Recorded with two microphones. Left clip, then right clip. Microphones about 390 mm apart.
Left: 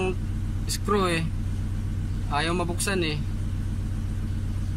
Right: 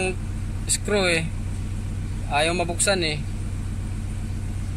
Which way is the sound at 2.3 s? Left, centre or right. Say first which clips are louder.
Right 5 dB; centre.